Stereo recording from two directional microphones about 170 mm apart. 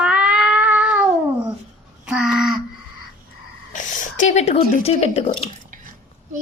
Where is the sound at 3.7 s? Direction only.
50° left (ahead or behind).